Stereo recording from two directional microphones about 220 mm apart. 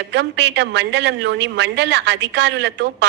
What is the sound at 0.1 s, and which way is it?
A woman's voice, 50° right (ahead or behind).